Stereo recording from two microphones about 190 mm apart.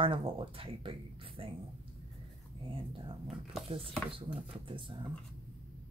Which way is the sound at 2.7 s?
25° right (ahead or behind).